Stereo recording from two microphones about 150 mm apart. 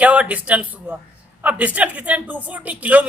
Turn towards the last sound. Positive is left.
turn(degrees=-10)  # may be behind; listen again after turning